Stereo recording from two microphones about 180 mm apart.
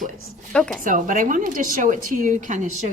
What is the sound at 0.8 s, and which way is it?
A woman's voice, 45° right (ahead or behind).